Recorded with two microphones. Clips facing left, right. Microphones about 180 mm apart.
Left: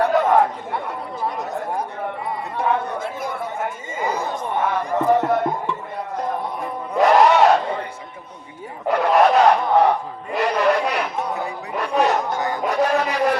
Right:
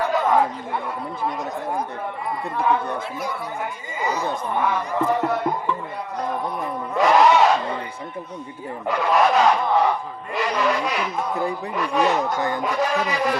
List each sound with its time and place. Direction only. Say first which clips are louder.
0.0 s chatter: left 3 dB; 65° left (ahead or behind)
2.6 s speech: left 1 dB; 55° left (ahead or behind)
5.0 s music: left 5 dB; 50° left (ahead or behind)
7.0 s a sound: left 2 dB; 50° left (ahead or behind)
8.9 s speech: left 3 dB; 60° left (ahead or behind)